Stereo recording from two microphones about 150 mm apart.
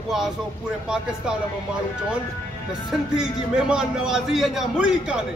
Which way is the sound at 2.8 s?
5° right (ahead or behind).